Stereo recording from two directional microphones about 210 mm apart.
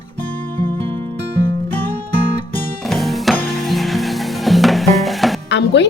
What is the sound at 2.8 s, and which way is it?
Music, centre (ahead or behind).